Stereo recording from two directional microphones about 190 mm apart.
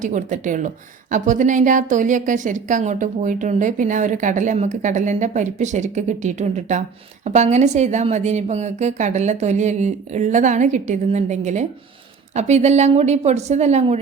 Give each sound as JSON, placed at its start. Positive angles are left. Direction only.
{"t": 0.0, "sound": "a woman's voice", "side_deg": -40}